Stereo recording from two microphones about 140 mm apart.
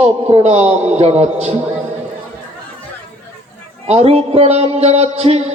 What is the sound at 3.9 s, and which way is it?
A man's voice, 50° right (ahead or behind).